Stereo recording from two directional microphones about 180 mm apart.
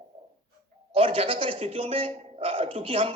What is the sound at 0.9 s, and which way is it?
A man's voice, 30° right (ahead or behind).